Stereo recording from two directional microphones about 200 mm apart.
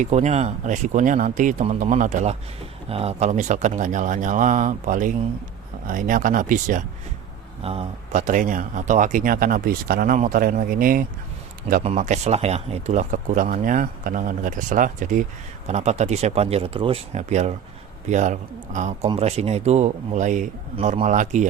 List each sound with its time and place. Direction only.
0.0 s speech: 35° right (ahead or behind)
7.6 s speech: 30° right (ahead or behind)
11.7 s speech: 35° right (ahead or behind)